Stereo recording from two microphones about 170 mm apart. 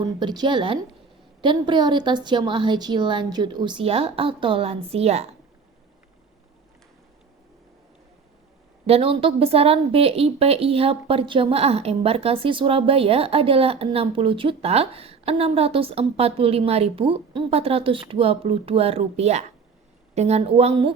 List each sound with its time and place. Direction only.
0.2 s a woman's voice: 25° right (ahead or behind)
8.9 s a woman's voice: 35° right (ahead or behind)